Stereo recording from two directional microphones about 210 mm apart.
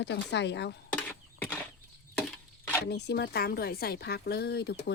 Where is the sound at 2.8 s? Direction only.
50° left (ahead or behind).